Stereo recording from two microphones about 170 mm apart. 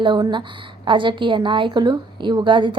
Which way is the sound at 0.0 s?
25° right (ahead or behind).